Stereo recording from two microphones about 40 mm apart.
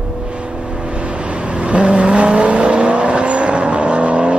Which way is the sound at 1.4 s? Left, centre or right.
Right.